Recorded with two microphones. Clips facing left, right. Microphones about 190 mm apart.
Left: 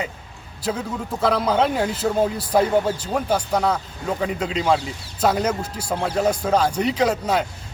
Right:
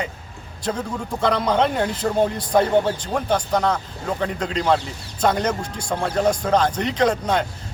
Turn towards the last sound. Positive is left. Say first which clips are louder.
# right 1 dB
turn(degrees=5)  # may be behind; listen again after turning